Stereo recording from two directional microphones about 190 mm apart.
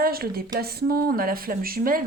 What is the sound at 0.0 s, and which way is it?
A woman's voice, 50° right (ahead or behind).